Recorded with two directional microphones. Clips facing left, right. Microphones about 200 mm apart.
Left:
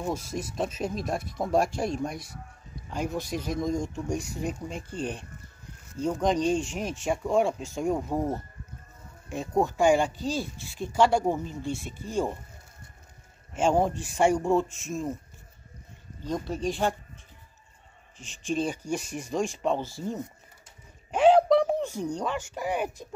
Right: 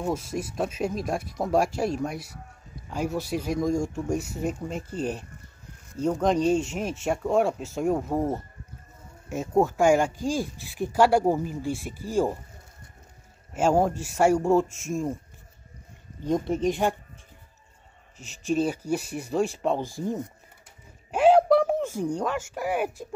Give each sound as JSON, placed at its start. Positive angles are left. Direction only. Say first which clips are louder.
{"t": 0.0, "sound": "speech", "louder": "right 3 dB", "side_deg": -5}
{"t": 13.5, "sound": "speech", "louder": "right 2 dB", "side_deg": -5}
{"t": 16.3, "sound": "speech", "louder": "right 5 dB", "side_deg": -20}
{"t": 18.1, "sound": "speech", "louder": "right 4 dB", "side_deg": -5}